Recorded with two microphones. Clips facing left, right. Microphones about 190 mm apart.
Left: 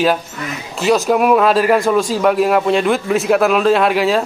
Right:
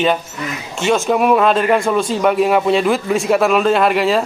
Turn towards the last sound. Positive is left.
turn(degrees=0)  # may be behind; listen again after turning